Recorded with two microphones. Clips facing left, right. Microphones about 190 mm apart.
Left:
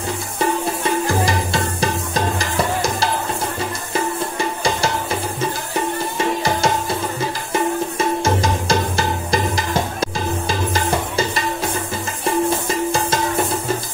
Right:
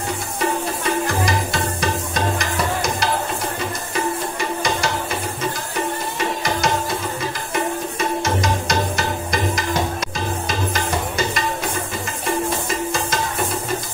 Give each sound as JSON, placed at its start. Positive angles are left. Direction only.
{"t": 1.2, "sound": "music", "side_deg": 30}
{"t": 6.1, "sound": "music", "side_deg": 30}
{"t": 8.2, "sound": "music", "side_deg": 30}